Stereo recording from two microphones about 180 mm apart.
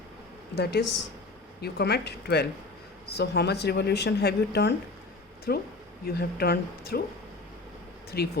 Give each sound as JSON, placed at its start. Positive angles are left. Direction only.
{"t": 0.5, "sound": "speech", "side_deg": 70}
{"t": 8.1, "sound": "speech", "side_deg": 60}